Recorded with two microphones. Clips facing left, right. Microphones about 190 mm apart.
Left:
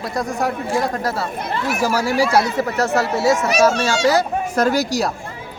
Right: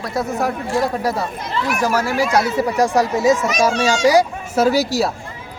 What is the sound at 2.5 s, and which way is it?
Speech, 15° right (ahead or behind).